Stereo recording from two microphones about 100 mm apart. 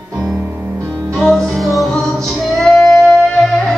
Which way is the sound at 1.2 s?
5° left (ahead or behind).